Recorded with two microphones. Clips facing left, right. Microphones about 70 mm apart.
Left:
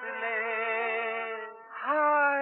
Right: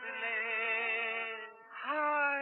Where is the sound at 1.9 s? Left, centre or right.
Left.